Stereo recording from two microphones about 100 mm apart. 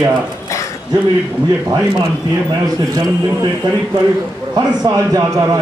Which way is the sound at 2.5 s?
40° right (ahead or behind).